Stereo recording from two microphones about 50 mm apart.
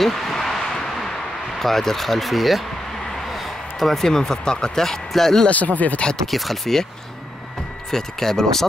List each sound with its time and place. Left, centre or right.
0.0 s a sound: centre
1.6 s speech: centre
5.5 s speech: left
6.3 s speech: centre
7.9 s speech: centre